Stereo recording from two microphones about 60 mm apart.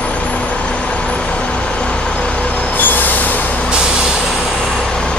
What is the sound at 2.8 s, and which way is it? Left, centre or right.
Train, left.